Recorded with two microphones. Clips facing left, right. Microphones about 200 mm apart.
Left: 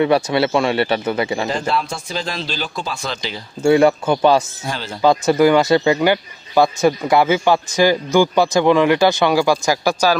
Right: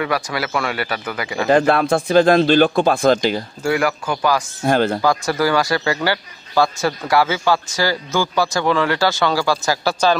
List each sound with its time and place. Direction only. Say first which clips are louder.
0.0 s speech: left 7 dB; 25° left (ahead or behind)
1.5 s speech: right 7 dB; 60° right (ahead or behind)
3.6 s speech: left 7 dB; 25° left (ahead or behind)
4.6 s speech: right 10 dB; 55° right (ahead or behind)
5.0 s speech: left 5 dB; 20° left (ahead or behind)